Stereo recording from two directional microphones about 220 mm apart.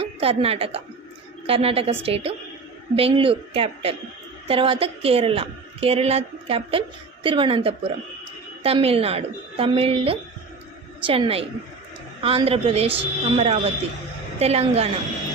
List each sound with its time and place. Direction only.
0.0 s a woman's voice: 25° right (ahead or behind)